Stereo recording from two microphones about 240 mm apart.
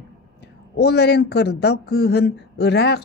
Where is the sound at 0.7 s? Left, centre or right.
Left.